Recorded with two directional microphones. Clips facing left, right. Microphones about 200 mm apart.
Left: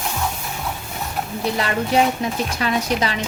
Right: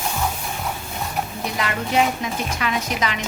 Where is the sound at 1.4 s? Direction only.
30° left (ahead or behind).